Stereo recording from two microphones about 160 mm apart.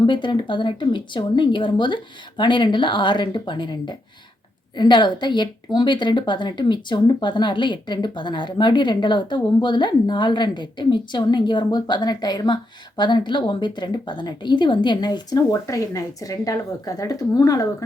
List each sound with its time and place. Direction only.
0.0 s speech: 30° left (ahead or behind)